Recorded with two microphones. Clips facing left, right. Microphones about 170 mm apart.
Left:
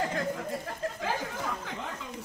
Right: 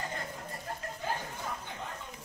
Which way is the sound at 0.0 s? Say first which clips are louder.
Left 9 dB; 90° left.